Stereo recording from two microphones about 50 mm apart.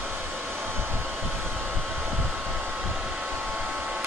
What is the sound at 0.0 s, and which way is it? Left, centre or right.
Hair dryer, right.